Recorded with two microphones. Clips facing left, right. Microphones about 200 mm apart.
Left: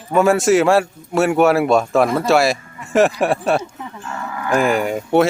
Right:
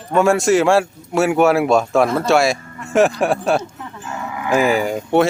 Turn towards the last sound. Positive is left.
turn(degrees=0)  # may be behind; listen again after turning